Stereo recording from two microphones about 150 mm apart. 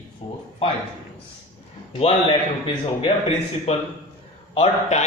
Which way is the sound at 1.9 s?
35° left (ahead or behind).